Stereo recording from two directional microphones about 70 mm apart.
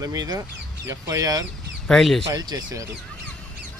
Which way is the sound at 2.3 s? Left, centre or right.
Right.